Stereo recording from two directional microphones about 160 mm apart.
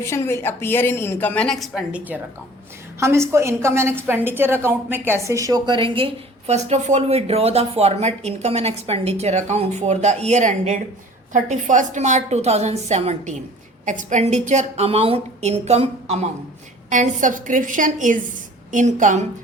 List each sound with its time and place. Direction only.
0.0 s a woman's voice: 15° left (ahead or behind); by 6.1 s 30° right (ahead or behind)
6.5 s speech: 45° right (ahead or behind)